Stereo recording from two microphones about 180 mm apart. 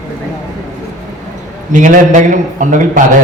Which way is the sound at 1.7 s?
45° right (ahead or behind).